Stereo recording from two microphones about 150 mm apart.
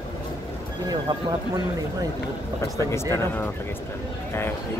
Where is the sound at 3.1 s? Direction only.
15° left (ahead or behind).